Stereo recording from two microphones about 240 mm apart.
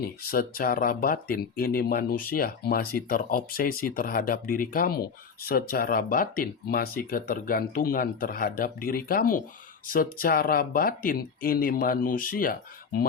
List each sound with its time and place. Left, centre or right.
0.0 s speech: left